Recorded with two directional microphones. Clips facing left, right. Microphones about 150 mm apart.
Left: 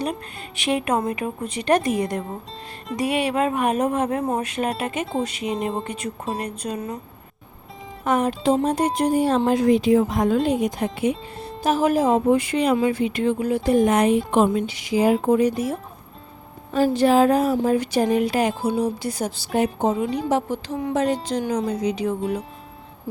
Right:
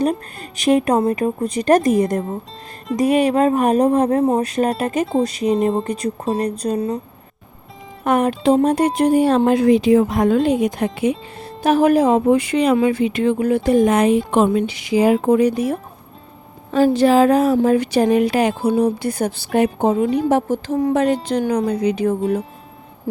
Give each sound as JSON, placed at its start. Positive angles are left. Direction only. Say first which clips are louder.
{"t": 0.5, "sound": "a woman's voice", "louder": "right 7 dB", "side_deg": -40}
{"t": 8.0, "sound": "speech", "louder": "right 4 dB", "side_deg": -60}
{"t": 11.6, "sound": "speech", "louder": "right 5 dB", "side_deg": -60}
{"t": 16.7, "sound": "speech", "louder": "right 4 dB", "side_deg": -90}
{"t": 18.7, "sound": "speech", "louder": "right 6 dB", "side_deg": -55}
{"t": 20.3, "sound": "a woman's voice", "louder": "right 5 dB", "side_deg": -45}
{"t": 20.9, "sound": "speech", "louder": "right 2 dB", "side_deg": -60}